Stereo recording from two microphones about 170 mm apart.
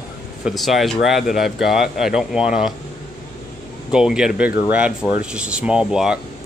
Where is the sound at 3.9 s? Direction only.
5° right (ahead or behind).